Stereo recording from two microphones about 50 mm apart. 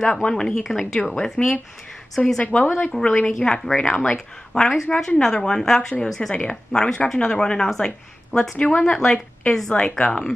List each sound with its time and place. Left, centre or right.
0.0 s speech: centre
2.2 s speech: left; by 9.8 s centre
9.8 s speech: left